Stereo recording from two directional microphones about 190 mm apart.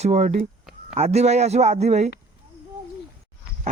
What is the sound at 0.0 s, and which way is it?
Speech, 35° right (ahead or behind).